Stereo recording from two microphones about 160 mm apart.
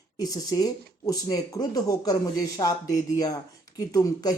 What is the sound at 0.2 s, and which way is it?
Speech, 25° left (ahead or behind).